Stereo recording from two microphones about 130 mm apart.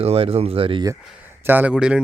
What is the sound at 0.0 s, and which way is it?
Speech, 50° right (ahead or behind).